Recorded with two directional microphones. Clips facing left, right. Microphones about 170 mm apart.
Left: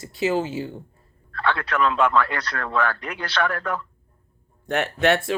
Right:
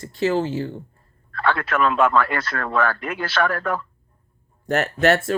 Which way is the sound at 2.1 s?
50° right (ahead or behind).